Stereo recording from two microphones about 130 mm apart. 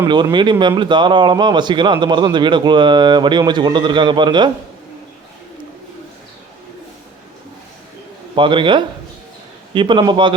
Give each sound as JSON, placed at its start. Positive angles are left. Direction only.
{"t": 0.1, "sound": "speech", "side_deg": -35}
{"t": 8.4, "sound": "speech", "side_deg": -40}